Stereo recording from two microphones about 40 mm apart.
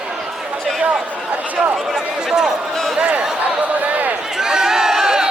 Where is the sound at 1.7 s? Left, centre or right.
Centre.